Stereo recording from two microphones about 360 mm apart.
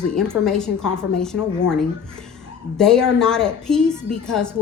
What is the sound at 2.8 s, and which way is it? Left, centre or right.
A woman's voice, centre.